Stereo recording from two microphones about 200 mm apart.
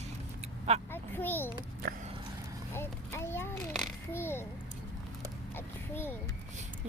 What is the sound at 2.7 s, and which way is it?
Speech, 10° left (ahead or behind).